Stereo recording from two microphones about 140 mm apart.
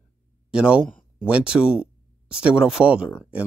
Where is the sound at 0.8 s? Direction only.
10° left (ahead or behind).